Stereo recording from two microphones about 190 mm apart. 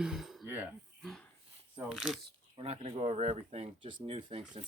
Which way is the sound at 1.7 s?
Centre (ahead or behind).